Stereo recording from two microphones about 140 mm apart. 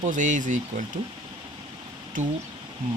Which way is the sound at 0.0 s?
65° right (ahead or behind).